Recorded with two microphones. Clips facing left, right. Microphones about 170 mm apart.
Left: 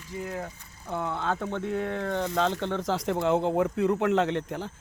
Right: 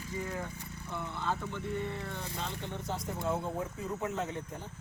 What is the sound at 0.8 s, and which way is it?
Speech, 70° left (ahead or behind).